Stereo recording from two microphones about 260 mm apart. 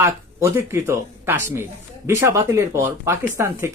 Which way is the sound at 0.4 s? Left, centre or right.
Centre.